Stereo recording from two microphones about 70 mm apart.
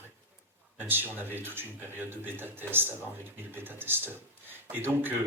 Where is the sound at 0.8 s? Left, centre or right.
Right.